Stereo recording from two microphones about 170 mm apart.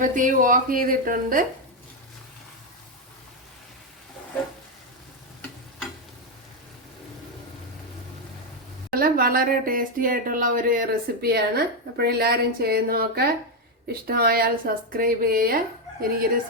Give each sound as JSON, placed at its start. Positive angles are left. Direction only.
{"t": 0.0, "sound": "speech", "side_deg": -50}
{"t": 8.9, "sound": "speech", "side_deg": -60}